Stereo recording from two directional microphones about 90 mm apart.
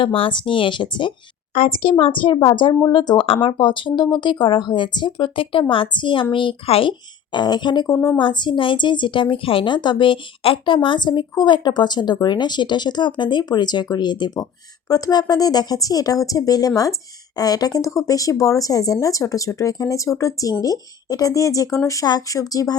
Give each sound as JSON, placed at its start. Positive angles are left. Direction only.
{"t": 0.0, "sound": "speech", "side_deg": 80}
{"t": 1.8, "sound": "speech", "side_deg": 80}
{"t": 2.9, "sound": "speech", "side_deg": 55}
{"t": 3.2, "sound": "speech", "side_deg": 70}
{"t": 7.3, "sound": "speech", "side_deg": 55}